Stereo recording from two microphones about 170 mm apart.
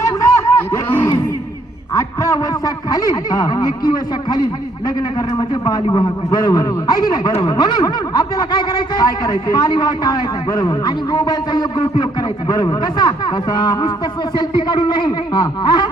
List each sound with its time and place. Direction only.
0.0 s a sound: 20° left (ahead or behind)
2.0 s a man's voice: 20° left (ahead or behind)
5.4 s speech: 25° left (ahead or behind)